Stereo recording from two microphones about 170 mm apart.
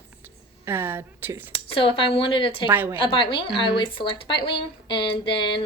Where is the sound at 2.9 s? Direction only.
30° left (ahead or behind).